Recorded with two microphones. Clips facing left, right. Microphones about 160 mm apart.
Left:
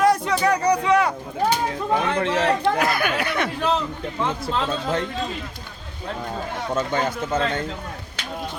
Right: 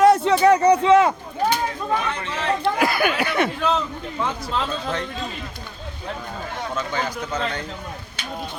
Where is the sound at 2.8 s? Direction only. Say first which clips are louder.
Right 2 dB; 5° right (ahead or behind).